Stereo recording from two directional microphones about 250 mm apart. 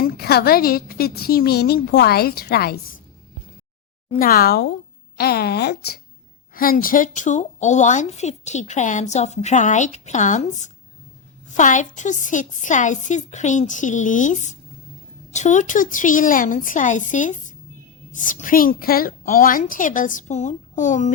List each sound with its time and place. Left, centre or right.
0.0 s a woman's voice: left
4.2 s a woman's voice: left